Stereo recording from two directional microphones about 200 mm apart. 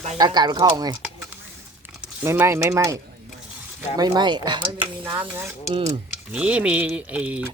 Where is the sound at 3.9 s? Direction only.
20° right (ahead or behind).